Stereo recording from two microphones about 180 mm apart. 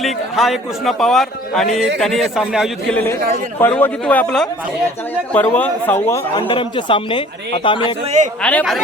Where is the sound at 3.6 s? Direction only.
10° left (ahead or behind).